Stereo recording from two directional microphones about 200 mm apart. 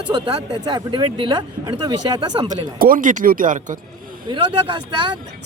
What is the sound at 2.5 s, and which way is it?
Speech, 45° right (ahead or behind).